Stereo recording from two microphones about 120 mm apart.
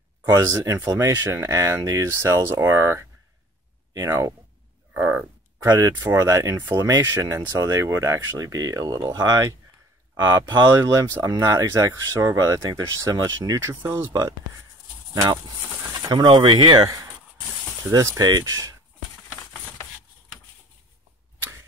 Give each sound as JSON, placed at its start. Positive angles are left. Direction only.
{"t": 0.2, "sound": "speech", "side_deg": -25}
{"t": 4.9, "sound": "a sound", "side_deg": -15}
{"t": 5.7, "sound": "speech", "side_deg": -30}
{"t": 16.1, "sound": "speech", "side_deg": -35}